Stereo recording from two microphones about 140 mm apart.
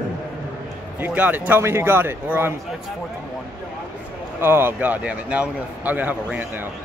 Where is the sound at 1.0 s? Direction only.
10° right (ahead or behind).